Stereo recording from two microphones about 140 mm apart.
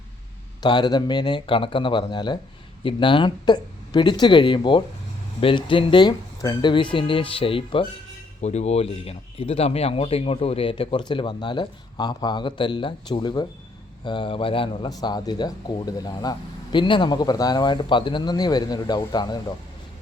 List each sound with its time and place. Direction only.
0.6 s speech: 30° left (ahead or behind)
8.4 s speech: 50° left (ahead or behind); by 19.5 s 30° left (ahead or behind)